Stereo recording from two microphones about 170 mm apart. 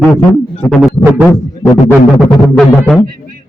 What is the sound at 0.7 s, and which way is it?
Music, centre (ahead or behind).